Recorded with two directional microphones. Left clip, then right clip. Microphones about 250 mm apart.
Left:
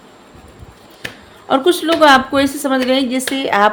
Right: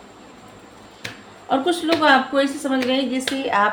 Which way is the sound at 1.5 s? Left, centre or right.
Left.